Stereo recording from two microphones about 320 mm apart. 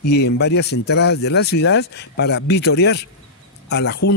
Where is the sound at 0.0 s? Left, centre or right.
Left.